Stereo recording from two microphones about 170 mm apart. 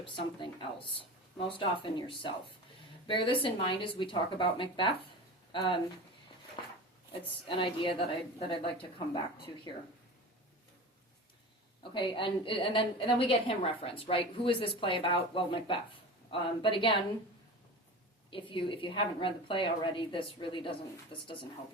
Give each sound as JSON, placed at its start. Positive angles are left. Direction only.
{"t": 1.5, "sound": "a woman's voice", "side_deg": 30}
{"t": 7.4, "sound": "a woman's voice", "side_deg": 30}
{"t": 11.8, "sound": "a woman's voice", "side_deg": 30}
{"t": 18.3, "sound": "a woman's voice", "side_deg": 30}